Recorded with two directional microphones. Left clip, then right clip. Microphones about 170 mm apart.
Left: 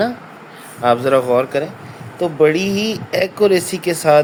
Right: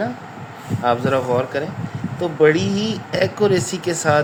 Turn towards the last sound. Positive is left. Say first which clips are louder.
# left 5 dB
turn(degrees=25)  # may be behind; listen again after turning